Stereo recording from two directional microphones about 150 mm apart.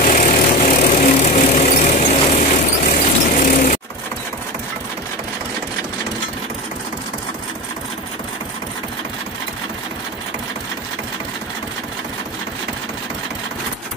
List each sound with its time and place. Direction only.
0.0 s vehicle: 60° left (ahead or behind)